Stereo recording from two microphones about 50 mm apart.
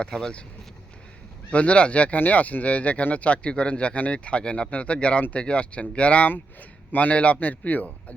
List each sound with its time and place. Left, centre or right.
0.0 s speech: centre
1.5 s speech: left